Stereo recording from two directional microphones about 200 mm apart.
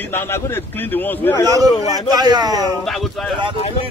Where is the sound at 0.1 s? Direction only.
10° left (ahead or behind).